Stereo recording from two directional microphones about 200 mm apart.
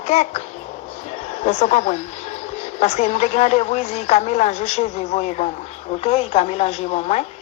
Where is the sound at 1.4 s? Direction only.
35° left (ahead or behind).